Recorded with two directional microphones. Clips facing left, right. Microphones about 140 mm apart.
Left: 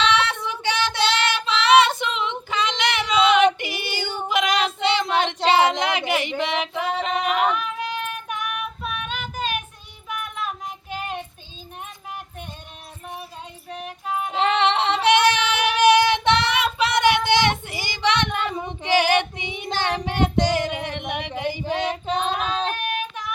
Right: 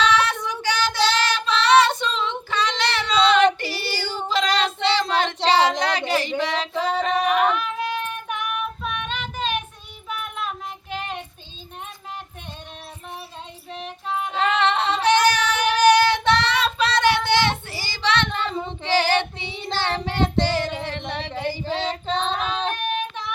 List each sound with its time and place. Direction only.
0.0 s child singing: 25° left (ahead or behind)
2.0 s female singing: 20° left (ahead or behind)
4.9 s child singing: 20° left (ahead or behind)
5.5 s a sound: 20° left (ahead or behind)
6.4 s female singing: 20° left (ahead or behind)
8.8 s child singing: 5° left (ahead or behind)
10.8 s child singing: 5° left (ahead or behind)
13.7 s music: 10° left (ahead or behind)
14.4 s female singing: 20° left (ahead or behind)